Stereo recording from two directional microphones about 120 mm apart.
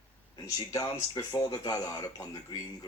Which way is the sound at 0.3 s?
30° left (ahead or behind).